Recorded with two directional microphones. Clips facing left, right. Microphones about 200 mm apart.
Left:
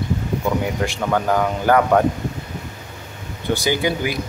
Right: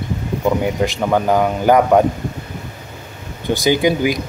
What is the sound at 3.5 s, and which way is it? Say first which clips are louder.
Speech: right 5 dB; 15° right (ahead or behind).